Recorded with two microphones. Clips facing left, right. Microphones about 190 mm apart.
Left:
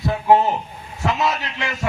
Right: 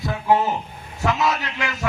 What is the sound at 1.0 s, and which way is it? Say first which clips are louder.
Speech: even; 30° left (ahead or behind).